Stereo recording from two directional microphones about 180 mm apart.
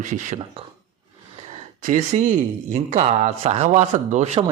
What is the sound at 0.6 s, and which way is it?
Speech, 30° right (ahead or behind).